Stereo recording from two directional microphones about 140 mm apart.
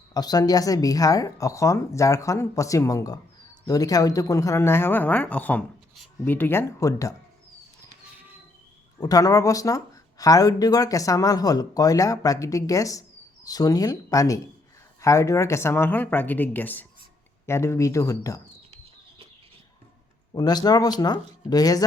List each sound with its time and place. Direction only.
0.1 s speech: 30° left (ahead or behind)
9.0 s speech: 25° left (ahead or behind)
20.3 s speech: 30° left (ahead or behind)